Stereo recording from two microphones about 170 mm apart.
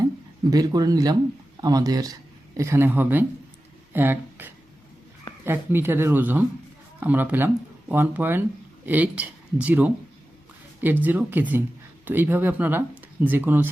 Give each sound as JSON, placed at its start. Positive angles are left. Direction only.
{"t": 0.5, "sound": "speech", "side_deg": -20}
{"t": 11.0, "sound": "speech", "side_deg": -10}